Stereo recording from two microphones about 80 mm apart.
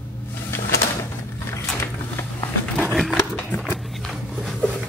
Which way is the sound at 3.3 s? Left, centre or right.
Left.